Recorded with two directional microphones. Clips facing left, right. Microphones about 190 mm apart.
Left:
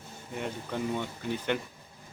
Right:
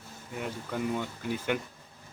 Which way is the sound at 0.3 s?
5° right (ahead or behind).